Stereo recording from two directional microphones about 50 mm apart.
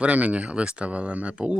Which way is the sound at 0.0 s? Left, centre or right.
Right.